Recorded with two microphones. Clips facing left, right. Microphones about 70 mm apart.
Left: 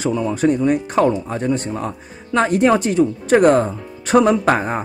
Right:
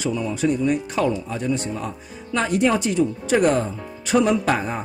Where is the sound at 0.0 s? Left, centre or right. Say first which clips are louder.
Left 5 dB; left.